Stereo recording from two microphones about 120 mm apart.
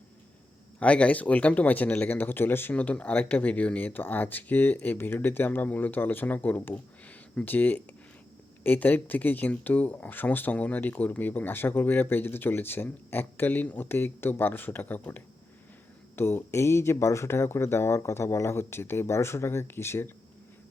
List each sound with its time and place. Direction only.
0.8 s speech: 10° left (ahead or behind)